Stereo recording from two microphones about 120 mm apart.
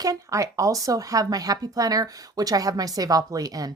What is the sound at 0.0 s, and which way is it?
Speech, 30° right (ahead or behind).